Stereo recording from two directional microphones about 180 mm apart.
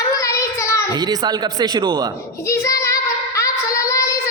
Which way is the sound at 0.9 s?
20° right (ahead or behind).